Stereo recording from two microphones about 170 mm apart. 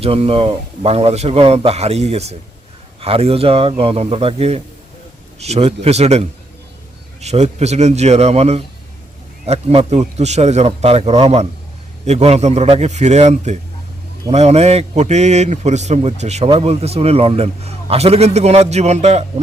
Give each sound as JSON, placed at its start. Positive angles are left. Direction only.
{"t": 0.0, "sound": "a man's voice", "side_deg": -35}